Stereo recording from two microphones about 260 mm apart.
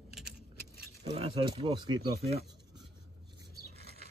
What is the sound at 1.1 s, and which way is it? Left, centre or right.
Speech, right.